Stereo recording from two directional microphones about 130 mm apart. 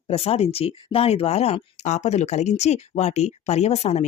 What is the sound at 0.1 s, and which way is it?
Speech, 50° left (ahead or behind).